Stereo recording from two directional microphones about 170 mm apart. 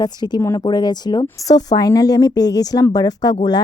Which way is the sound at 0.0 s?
25° left (ahead or behind).